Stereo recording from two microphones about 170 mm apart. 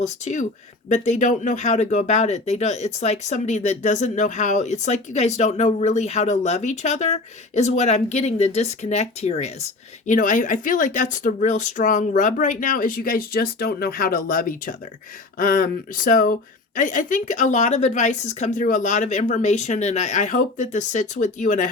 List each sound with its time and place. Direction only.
0.0 s speech: 45° left (ahead or behind)
10.1 s speech: 50° left (ahead or behind)